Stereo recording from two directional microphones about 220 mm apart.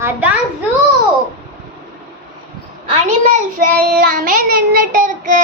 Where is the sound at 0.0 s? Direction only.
5° right (ahead or behind).